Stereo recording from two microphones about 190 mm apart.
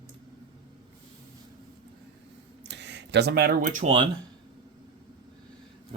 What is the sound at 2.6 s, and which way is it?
Speech, 65° right (ahead or behind).